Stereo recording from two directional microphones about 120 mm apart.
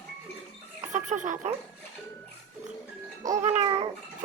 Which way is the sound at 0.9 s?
90° right.